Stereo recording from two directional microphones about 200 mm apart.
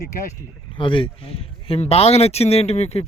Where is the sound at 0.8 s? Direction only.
25° left (ahead or behind).